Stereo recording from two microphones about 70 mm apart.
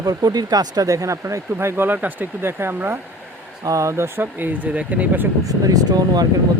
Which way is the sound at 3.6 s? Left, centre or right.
Right.